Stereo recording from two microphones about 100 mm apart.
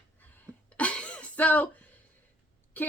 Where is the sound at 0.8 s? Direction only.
10° left (ahead or behind).